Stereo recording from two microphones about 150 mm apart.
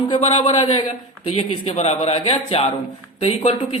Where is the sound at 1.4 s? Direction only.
45° left (ahead or behind).